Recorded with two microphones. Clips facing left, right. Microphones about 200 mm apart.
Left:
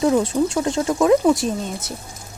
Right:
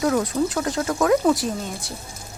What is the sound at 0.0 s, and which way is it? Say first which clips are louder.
Speech: left 3 dB; 25° left (ahead or behind).